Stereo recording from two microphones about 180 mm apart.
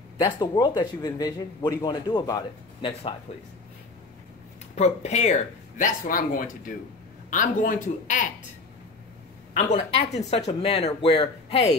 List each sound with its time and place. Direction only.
0.2 s speech: 25° left (ahead or behind)
4.7 s speech: 40° left (ahead or behind)
9.5 s speech: 40° left (ahead or behind)